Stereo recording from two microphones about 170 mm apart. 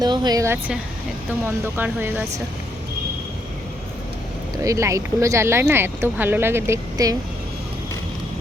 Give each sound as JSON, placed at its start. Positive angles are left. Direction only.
{"t": 0.0, "sound": "speech", "side_deg": -25}
{"t": 4.5, "sound": "speech", "side_deg": -20}